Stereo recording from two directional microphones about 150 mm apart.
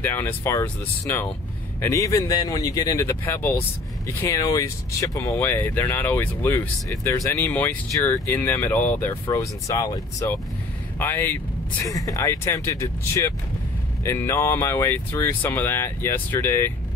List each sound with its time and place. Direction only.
0.0 s speech: 15° left (ahead or behind)
9.3 s speech: 25° left (ahead or behind)